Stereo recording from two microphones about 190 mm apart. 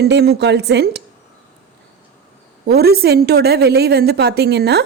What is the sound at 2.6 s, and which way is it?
A woman's voice, 55° right (ahead or behind).